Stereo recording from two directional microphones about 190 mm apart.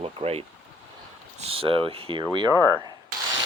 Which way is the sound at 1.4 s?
30° right (ahead or behind).